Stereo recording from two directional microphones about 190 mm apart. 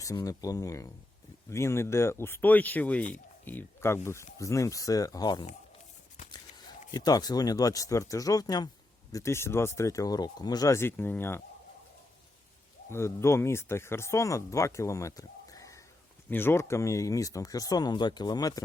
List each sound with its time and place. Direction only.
0.0 s speech: 20° left (ahead or behind)
12.9 s speech: 15° left (ahead or behind)